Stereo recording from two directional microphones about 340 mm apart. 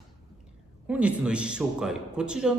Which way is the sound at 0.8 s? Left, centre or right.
Centre.